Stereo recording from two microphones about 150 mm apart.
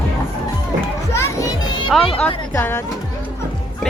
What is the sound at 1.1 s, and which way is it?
Music, 20° left (ahead or behind).